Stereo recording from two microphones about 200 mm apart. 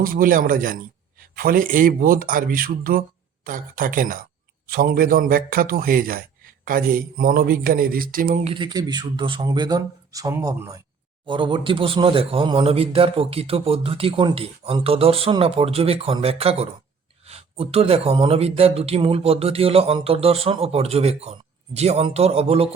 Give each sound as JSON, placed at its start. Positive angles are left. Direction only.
{"t": 0.0, "sound": "speech", "side_deg": -45}
{"t": 8.5, "sound": "speech", "side_deg": -20}